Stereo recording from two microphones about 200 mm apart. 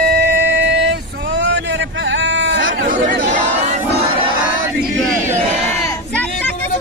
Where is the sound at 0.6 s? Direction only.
60° right (ahead or behind).